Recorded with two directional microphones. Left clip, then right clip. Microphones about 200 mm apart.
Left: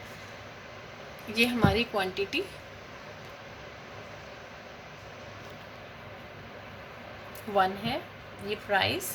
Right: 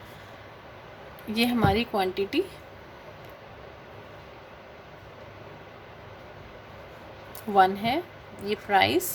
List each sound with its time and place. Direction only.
1.3 s speech: 55° right (ahead or behind)
7.5 s speech: 60° right (ahead or behind)